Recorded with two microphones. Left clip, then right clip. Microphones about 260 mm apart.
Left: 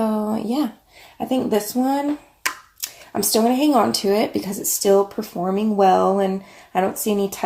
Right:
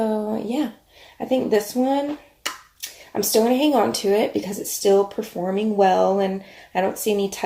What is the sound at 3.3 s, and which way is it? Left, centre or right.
Speech, left.